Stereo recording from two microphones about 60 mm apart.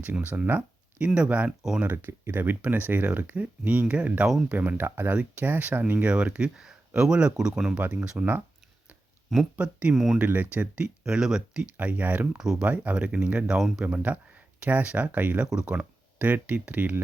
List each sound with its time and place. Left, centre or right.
0.0 s speech: right
2.0 s speech: right
4.3 s speech: centre
4.5 s speech: right; by 7.8 s centre
7.8 s speech: right
9.3 s speech: centre
10.2 s speech: right
12.4 s speech: centre
12.6 s speech: right